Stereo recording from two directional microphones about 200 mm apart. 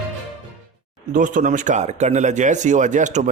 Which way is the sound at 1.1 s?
40° right (ahead or behind).